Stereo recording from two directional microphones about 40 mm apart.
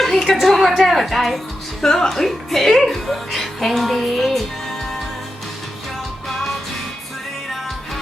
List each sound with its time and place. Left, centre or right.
0.0 s a sound: centre
0.8 s speech: centre
1.8 s speech: centre